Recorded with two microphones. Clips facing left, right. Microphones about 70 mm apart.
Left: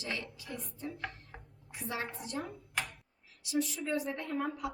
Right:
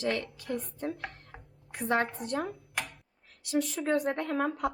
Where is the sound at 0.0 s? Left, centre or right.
Right.